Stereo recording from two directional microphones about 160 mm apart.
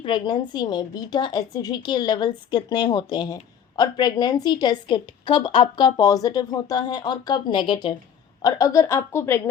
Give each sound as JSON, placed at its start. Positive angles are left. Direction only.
{"t": 0.0, "sound": "a woman's voice", "side_deg": 30}